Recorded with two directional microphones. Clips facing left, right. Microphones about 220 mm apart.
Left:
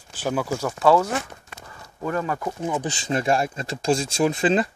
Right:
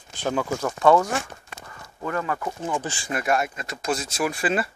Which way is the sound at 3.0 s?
30° left (ahead or behind).